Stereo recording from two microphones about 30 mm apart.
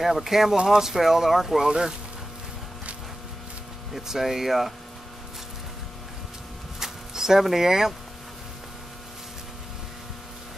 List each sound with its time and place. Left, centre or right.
0.0 s speech: centre
1.7 s speech: right
4.1 s speech: centre
6.8 s a sound: centre